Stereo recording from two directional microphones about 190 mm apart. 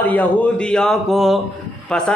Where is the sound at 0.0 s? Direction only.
10° left (ahead or behind).